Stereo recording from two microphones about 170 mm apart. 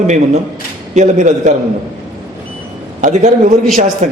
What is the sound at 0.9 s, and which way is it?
Speech, 45° right (ahead or behind).